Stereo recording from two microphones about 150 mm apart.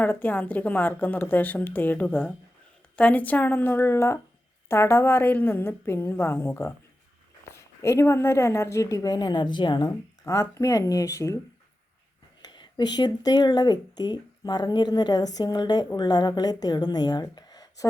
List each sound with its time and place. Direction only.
0.0 s a woman's voice: 10° left (ahead or behind)
12.4 s a woman's voice: 30° left (ahead or behind)